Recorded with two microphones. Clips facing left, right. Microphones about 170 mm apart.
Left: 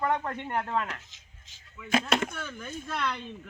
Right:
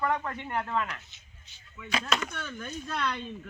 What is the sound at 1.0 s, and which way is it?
Speech, 90° left.